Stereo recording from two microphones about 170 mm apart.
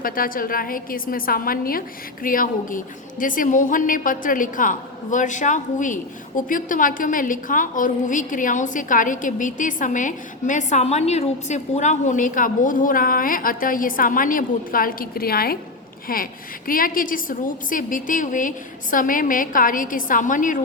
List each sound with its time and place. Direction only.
0.0 s a woman's voice: 55° left (ahead or behind)